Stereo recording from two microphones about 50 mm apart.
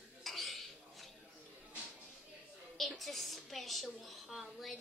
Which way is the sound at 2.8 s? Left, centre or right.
Centre.